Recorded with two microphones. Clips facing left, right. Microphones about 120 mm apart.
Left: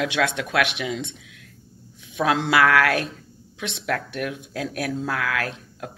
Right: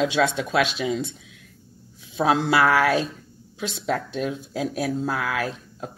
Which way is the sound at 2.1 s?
30° right (ahead or behind).